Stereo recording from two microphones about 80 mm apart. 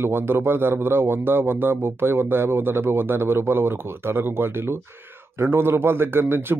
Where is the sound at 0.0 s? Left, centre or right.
Right.